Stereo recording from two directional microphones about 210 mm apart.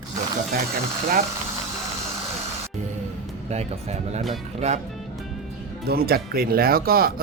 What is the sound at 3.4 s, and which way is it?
Speech, 30° right (ahead or behind).